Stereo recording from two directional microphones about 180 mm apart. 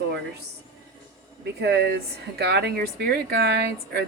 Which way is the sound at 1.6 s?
65° right (ahead or behind).